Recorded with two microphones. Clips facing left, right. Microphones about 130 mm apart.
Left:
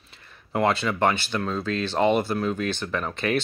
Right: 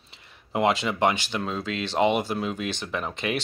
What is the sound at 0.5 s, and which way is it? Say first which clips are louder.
Speech: even; 20° right (ahead or behind).